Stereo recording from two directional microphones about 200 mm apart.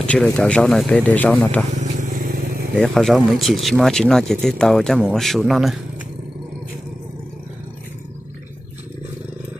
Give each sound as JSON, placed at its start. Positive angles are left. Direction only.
{"t": 0.0, "sound": "speech", "side_deg": 5}
{"t": 1.8, "sound": "vehicle", "side_deg": -40}
{"t": 2.8, "sound": "speech", "side_deg": 0}